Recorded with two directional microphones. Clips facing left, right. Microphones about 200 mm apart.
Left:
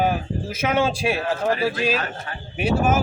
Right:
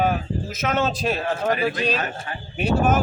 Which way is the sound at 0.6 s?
10° left (ahead or behind).